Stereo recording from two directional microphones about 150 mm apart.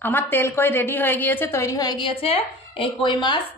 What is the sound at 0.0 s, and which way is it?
A woman's voice, 15° left (ahead or behind).